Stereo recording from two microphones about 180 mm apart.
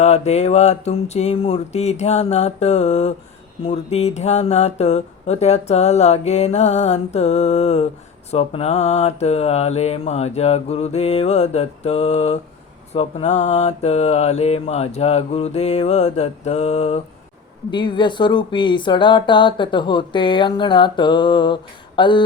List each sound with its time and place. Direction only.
0.0 s speech: 35° left (ahead or behind)
17.7 s speech: 25° left (ahead or behind)